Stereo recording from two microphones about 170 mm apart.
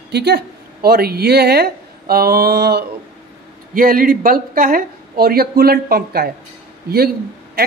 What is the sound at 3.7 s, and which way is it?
Speech, 55° right (ahead or behind).